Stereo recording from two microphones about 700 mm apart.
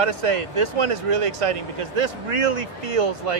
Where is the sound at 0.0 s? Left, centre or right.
Right.